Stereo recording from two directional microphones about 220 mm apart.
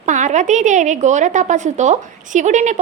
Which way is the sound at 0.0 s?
35° right (ahead or behind).